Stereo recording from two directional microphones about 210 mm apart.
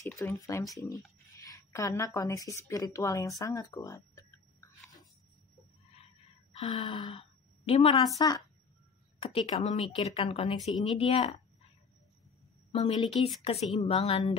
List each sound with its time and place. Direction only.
0.2 s a woman's voice: 15° left (ahead or behind)
6.5 s a woman's voice: 25° left (ahead or behind)
12.7 s a woman's voice: 25° left (ahead or behind)